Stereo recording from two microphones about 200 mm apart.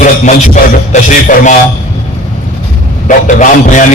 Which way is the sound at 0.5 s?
40° left (ahead or behind).